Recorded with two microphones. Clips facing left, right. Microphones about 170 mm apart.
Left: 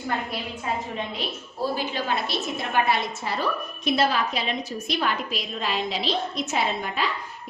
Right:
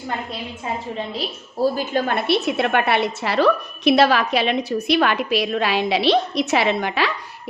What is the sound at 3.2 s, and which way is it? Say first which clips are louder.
A woman's voice: right 9 dB; 80° right.